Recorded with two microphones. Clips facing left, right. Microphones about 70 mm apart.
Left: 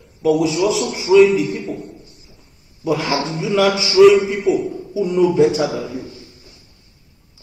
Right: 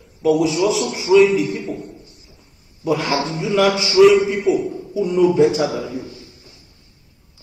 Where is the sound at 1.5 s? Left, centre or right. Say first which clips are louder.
Even; left.